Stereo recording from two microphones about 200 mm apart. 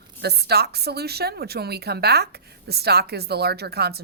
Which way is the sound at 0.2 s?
55° right (ahead or behind).